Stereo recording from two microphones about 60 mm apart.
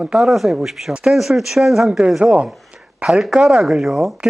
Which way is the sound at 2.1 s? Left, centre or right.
Centre.